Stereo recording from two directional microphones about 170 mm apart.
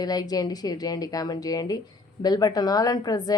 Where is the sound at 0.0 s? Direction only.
25° left (ahead or behind).